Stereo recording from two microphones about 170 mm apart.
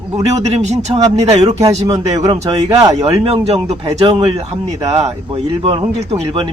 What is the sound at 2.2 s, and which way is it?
Speech, 20° right (ahead or behind).